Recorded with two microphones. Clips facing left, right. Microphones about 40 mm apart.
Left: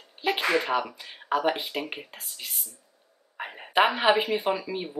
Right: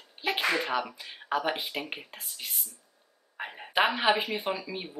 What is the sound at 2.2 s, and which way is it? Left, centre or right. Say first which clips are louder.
Speech: left 1 dB; centre.